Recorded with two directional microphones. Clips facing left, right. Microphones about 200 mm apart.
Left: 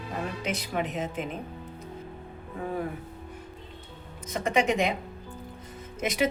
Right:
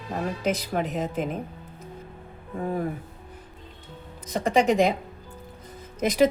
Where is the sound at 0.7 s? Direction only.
40° right (ahead or behind).